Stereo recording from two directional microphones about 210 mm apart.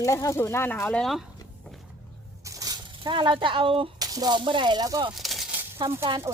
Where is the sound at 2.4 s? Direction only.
15° right (ahead or behind).